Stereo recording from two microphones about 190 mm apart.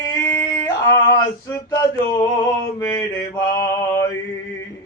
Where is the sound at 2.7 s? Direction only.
15° left (ahead or behind).